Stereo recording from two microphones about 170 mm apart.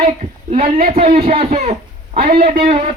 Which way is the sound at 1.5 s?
45° right (ahead or behind).